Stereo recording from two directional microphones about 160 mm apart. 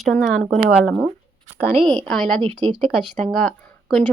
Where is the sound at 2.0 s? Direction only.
5° left (ahead or behind).